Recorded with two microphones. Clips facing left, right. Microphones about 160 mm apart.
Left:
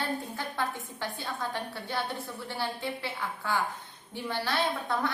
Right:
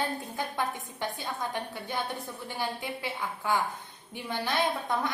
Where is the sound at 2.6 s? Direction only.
15° right (ahead or behind).